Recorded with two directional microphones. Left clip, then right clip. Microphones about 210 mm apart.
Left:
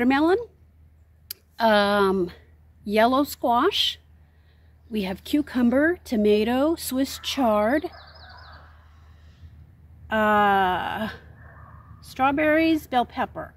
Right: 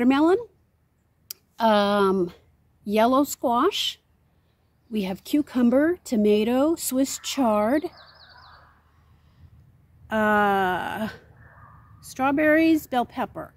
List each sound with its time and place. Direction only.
0.0 s speech: 15° right (ahead or behind)
10.0 s speech: 20° right (ahead or behind)